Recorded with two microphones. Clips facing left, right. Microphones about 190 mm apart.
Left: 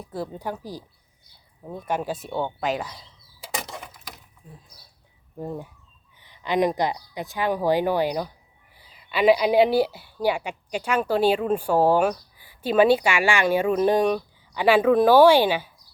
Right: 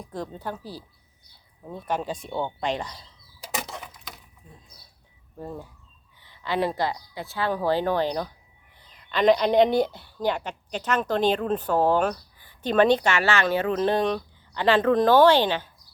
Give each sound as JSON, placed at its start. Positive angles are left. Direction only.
{"t": 0.0, "sound": "a woman's voice", "side_deg": 10}
{"t": 3.4, "sound": "a sound", "side_deg": 0}
{"t": 5.4, "sound": "a woman's voice", "side_deg": 15}